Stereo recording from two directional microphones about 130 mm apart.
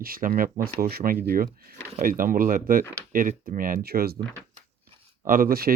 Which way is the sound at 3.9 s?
75° right (ahead or behind).